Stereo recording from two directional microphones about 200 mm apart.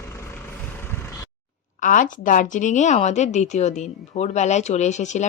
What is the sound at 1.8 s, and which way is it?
A woman's voice, 40° left (ahead or behind).